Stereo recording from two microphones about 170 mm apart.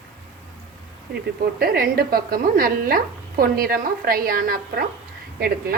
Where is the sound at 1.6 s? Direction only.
65° right (ahead or behind).